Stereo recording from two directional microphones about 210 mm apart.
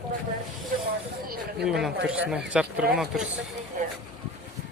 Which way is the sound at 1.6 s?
Centre (ahead or behind).